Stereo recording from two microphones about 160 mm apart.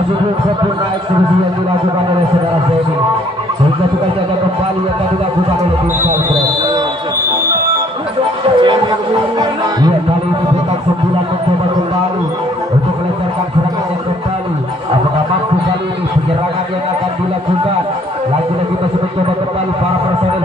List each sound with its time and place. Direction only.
8.5 s music: 30° right (ahead or behind)